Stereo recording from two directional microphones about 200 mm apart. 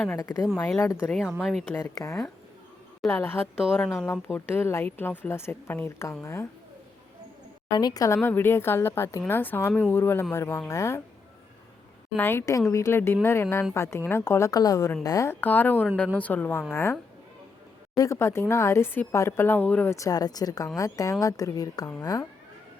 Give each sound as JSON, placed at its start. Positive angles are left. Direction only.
{"t": 0.1, "sound": "a woman's voice", "side_deg": 15}
{"t": 1.1, "sound": "speech", "side_deg": -5}
{"t": 1.7, "sound": "a woman's voice", "side_deg": 15}
{"t": 3.6, "sound": "speech", "side_deg": 0}
{"t": 4.0, "sound": "a woman's voice", "side_deg": 10}
{"t": 7.7, "sound": "a woman's voice", "side_deg": 20}
{"t": 12.1, "sound": "a woman's voice", "side_deg": 10}